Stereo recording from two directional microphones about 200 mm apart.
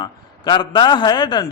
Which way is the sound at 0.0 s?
20° left (ahead or behind).